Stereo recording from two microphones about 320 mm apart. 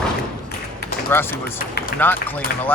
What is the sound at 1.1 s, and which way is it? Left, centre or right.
A man's voice, centre.